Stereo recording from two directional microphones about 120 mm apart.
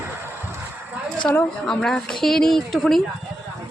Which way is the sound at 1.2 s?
5° left (ahead or behind).